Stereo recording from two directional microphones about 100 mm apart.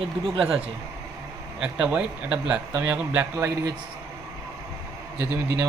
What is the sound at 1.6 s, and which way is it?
Speech, 10° right (ahead or behind).